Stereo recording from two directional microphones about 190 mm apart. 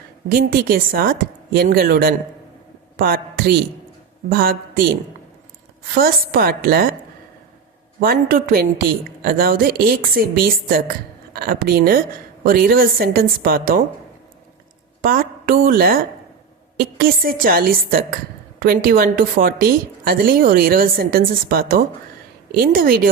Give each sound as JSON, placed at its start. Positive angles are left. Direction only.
{"t": 0.3, "sound": "a woman's voice", "side_deg": -50}
{"t": 8.0, "sound": "a woman's voice", "side_deg": -50}
{"t": 15.0, "sound": "a woman's voice", "side_deg": -50}